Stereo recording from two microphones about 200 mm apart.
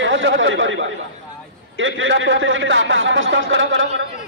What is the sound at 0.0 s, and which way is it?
A man's voice, 70° right (ahead or behind).